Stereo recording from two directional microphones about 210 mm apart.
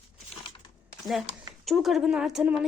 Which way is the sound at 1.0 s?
Centre (ahead or behind).